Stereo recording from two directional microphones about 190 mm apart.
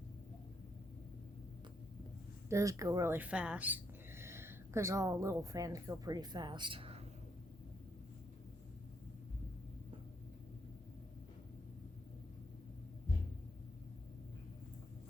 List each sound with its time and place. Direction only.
2.5 s speech: 15° right (ahead or behind)